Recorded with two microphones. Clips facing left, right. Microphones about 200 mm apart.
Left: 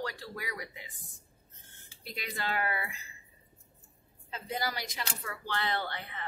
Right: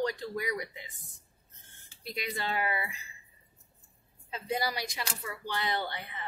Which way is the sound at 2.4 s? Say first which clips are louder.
Even; 20° right (ahead or behind).